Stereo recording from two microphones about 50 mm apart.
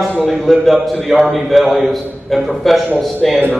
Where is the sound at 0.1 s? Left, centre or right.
Centre.